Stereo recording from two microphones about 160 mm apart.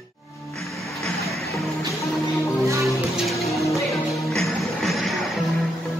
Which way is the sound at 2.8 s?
Centre (ahead or behind).